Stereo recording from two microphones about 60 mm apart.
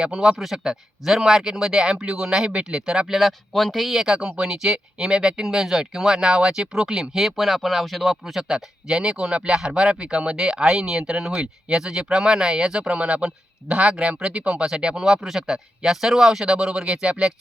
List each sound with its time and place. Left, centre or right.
0.0 s speech: centre